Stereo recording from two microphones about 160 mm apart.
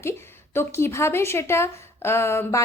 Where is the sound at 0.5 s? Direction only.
15° left (ahead or behind).